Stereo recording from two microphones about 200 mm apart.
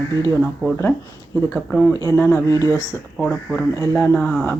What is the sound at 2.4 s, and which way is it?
Speech, 20° right (ahead or behind).